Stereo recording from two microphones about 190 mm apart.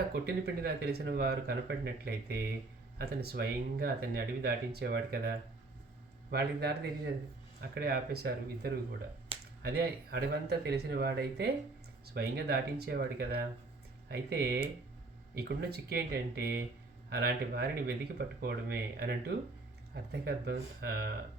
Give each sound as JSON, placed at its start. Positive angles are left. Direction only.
{"t": 0.1, "sound": "speech", "side_deg": -55}
{"t": 6.3, "sound": "speech", "side_deg": -55}
{"t": 9.3, "sound": "a sound", "side_deg": -30}
{"t": 9.6, "sound": "speech", "side_deg": -55}